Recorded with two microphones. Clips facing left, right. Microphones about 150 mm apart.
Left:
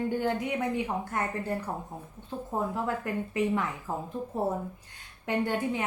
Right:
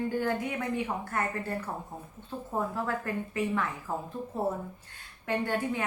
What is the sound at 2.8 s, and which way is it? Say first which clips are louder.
Speech: left 1 dB; 15° left (ahead or behind).